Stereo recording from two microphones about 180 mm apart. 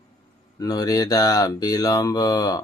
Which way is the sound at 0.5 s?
20° left (ahead or behind).